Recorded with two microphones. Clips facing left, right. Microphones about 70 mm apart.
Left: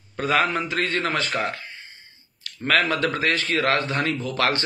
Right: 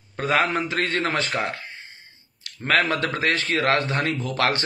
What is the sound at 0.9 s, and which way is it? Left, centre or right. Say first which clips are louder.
Speech: even; right.